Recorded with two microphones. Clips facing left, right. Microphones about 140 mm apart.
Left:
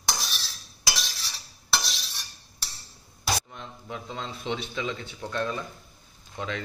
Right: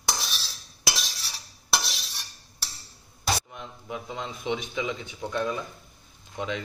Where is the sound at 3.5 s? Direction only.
15° right (ahead or behind).